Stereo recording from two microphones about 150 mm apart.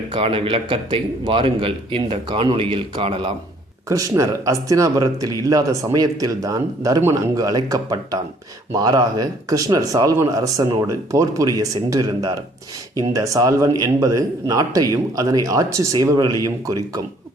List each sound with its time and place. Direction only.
0.1 s a man's voice: 40° right (ahead or behind)
3.8 s speech: 20° right (ahead or behind)